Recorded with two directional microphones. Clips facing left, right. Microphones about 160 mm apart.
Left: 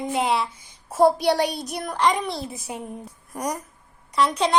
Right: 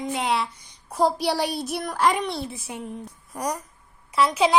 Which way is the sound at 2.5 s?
40° left (ahead or behind).